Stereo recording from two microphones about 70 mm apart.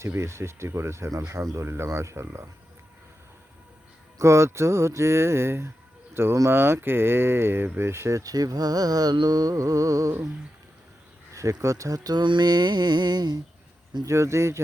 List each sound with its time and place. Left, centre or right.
0.0 s speech: right
1.5 s speech: right
4.2 s speech: right
11.3 s speech: right
12.1 s mantra: right
14.0 s speech: right